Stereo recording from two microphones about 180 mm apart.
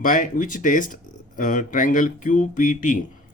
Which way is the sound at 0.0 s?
50° left (ahead or behind).